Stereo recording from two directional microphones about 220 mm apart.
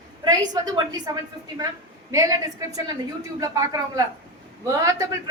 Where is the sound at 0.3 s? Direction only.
15° right (ahead or behind).